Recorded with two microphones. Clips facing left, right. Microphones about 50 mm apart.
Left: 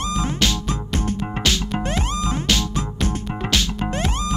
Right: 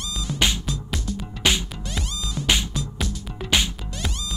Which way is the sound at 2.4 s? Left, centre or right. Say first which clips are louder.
Right 2 dB; centre.